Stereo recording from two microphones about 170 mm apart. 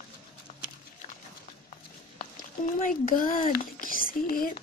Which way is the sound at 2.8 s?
55° left (ahead or behind).